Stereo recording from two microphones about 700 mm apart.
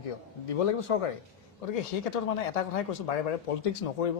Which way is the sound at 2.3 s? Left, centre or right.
Left.